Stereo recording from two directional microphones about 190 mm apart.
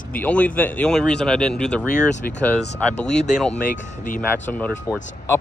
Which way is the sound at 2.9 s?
35° left (ahead or behind).